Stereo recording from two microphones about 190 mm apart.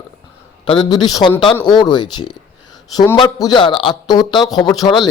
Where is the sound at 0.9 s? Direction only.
20° left (ahead or behind).